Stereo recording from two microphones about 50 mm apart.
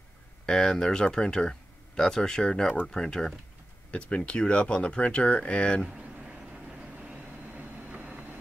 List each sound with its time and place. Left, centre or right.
0.5 s speech: centre
3.9 s speech: left
6.2 s vehicle: centre
7.3 s vehicle: right